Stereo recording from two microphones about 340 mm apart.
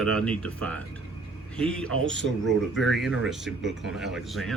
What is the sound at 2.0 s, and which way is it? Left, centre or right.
Speech, right.